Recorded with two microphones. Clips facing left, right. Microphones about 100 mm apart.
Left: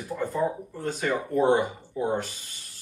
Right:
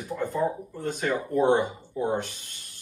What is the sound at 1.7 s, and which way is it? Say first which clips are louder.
Speech: even; 5° right (ahead or behind).